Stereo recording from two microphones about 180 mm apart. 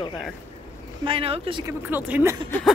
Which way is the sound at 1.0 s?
30° right (ahead or behind).